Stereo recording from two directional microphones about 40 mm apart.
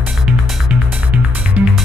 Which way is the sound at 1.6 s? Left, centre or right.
Right.